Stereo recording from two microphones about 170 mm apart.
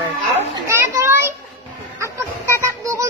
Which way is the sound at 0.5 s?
15° right (ahead or behind).